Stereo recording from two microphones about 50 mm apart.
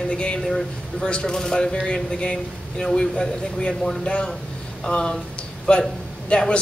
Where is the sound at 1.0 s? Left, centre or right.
Centre.